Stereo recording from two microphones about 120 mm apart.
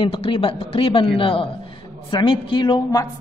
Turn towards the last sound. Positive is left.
turn(degrees=35)  # may be behind; listen again after turning